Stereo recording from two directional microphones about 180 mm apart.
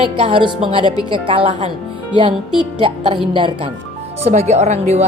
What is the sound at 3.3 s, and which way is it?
A woman's voice, 30° right (ahead or behind).